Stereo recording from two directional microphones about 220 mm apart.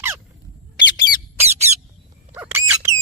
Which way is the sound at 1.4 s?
30° right (ahead or behind).